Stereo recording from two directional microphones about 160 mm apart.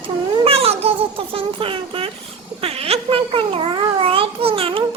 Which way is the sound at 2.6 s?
40° right (ahead or behind).